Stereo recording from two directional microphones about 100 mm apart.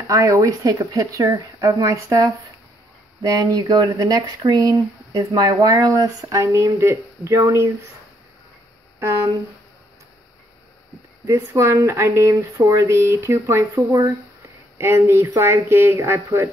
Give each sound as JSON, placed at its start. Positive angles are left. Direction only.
{"t": 0.1, "sound": "speech", "side_deg": -35}
{"t": 11.2, "sound": "speech", "side_deg": -30}